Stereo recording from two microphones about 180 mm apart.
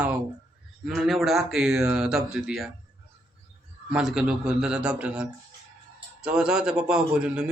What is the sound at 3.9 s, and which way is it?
Speech, 5° right (ahead or behind).